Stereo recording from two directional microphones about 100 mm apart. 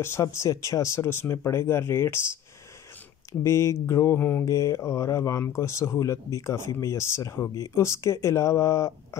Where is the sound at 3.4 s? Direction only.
25° left (ahead or behind).